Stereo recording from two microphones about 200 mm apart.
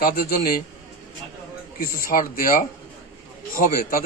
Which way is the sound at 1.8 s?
45° left (ahead or behind).